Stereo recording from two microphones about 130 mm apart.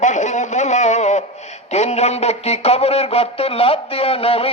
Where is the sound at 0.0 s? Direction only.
70° left (ahead or behind).